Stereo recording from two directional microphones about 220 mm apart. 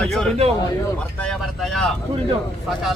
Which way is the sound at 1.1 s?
5° left (ahead or behind).